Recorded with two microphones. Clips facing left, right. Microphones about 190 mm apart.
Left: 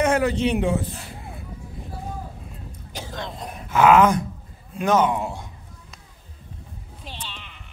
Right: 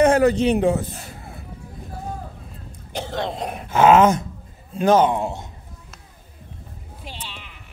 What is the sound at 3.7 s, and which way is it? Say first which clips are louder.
A man's voice: right 2 dB; 25° right (ahead or behind).